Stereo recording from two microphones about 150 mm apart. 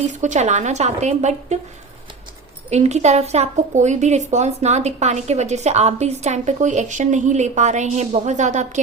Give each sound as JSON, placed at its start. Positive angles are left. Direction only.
{"t": 0.1, "sound": "a woman's voice", "side_deg": -55}
{"t": 2.6, "sound": "a woman's voice", "side_deg": -50}